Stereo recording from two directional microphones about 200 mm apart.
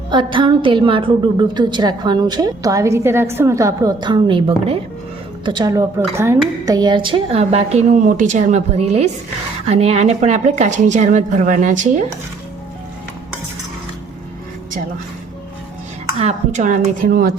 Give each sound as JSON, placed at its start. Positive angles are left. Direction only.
{"t": 0.1, "sound": "a woman's voice", "side_deg": -25}
{"t": 16.1, "sound": "a woman's voice", "side_deg": -35}
{"t": 17.1, "sound": "speech", "side_deg": -50}